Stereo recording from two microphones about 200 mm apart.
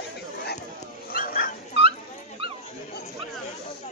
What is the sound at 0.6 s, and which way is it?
Dog, 45° left (ahead or behind).